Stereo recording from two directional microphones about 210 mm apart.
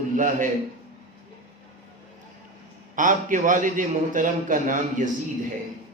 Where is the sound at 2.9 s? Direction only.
40° right (ahead or behind).